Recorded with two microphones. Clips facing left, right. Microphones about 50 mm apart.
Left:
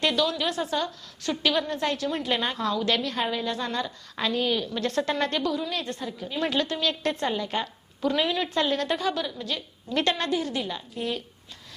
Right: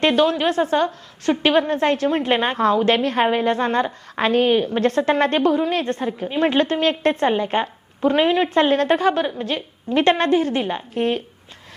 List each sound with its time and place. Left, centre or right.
0.0 s a woman's voice: right